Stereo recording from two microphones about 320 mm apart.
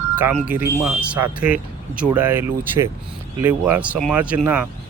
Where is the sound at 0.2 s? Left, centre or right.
Centre.